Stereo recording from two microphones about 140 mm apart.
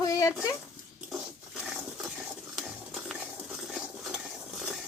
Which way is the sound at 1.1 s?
5° right (ahead or behind).